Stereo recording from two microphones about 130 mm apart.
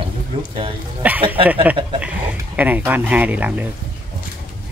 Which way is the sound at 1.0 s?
10° right (ahead or behind).